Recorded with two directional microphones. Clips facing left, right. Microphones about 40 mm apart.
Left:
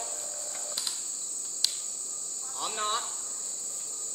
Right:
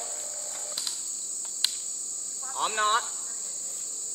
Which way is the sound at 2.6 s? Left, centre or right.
Right.